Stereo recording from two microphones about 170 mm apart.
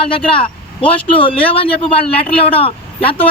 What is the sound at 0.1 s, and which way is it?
Speech, 30° left (ahead or behind).